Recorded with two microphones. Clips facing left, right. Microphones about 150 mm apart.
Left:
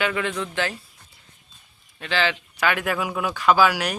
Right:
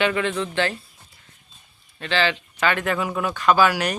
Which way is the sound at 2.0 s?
10° left (ahead or behind).